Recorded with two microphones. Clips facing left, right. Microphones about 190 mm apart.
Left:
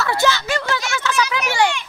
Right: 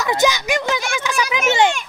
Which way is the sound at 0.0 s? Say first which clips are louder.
Right 1 dB; 15° right (ahead or behind).